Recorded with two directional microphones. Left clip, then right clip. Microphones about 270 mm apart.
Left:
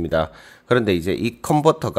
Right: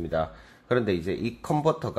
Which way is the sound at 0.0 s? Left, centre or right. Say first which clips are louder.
Left 7 dB; left.